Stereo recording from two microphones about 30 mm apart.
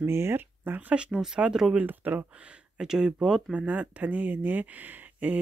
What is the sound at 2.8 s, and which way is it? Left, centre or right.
Speech, right.